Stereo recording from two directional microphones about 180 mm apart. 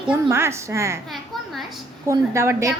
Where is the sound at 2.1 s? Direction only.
15° right (ahead or behind).